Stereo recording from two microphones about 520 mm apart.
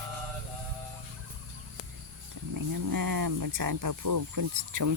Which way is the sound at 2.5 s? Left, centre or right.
Right.